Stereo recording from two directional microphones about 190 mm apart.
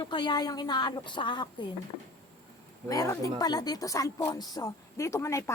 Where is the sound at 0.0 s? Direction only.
25° left (ahead or behind).